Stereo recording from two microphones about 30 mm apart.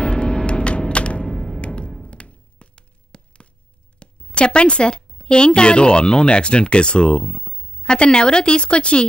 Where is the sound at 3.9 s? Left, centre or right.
Left.